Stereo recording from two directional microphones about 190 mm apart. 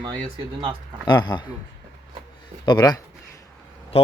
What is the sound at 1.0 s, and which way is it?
Speech, 20° left (ahead or behind).